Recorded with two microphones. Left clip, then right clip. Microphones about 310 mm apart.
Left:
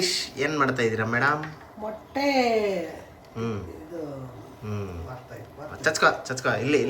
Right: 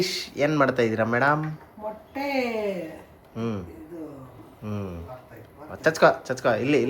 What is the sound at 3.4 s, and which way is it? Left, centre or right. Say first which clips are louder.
Speech: even; centre.